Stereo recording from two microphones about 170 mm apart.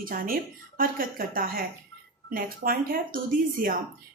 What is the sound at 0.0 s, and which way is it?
Speech, 55° right (ahead or behind).